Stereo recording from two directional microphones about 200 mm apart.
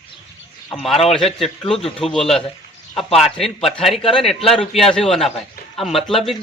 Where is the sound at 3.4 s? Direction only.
Centre (ahead or behind).